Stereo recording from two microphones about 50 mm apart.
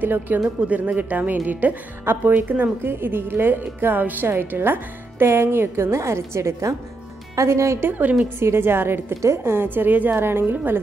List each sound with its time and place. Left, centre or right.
0.0 s speech: right
0.6 s speech: right
2.8 s a woman's voice: right
7.3 s a woman's voice: right
8.4 s a woman's voice: right
10.4 s speech: right